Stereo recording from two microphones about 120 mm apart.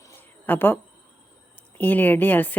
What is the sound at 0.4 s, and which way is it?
Speech, 15° left (ahead or behind).